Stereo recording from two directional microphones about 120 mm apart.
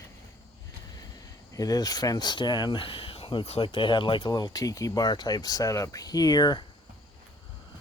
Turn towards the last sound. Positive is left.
turn(degrees=35)  # may be behind; listen again after turning